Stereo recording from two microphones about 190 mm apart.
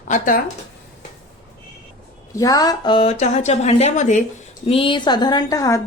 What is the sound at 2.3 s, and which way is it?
A woman's voice, 20° left (ahead or behind).